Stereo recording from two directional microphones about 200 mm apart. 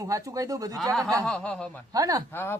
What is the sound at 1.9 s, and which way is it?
Speech, 20° right (ahead or behind).